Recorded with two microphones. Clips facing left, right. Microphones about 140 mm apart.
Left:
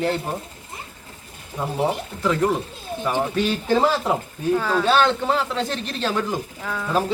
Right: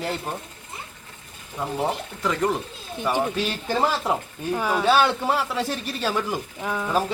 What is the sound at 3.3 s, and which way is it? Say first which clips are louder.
Speech: left 5 dB; centre (ahead or behind).